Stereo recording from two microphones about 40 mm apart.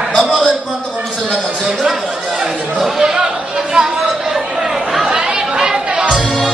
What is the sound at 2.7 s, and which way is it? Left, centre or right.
Chatter, centre.